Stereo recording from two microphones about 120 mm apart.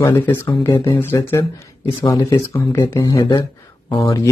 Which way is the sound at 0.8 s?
50° left (ahead or behind).